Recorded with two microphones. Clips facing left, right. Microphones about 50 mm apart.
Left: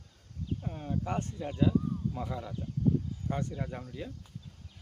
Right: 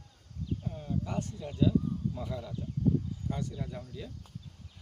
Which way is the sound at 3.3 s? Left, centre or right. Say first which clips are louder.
Left 3 dB; left.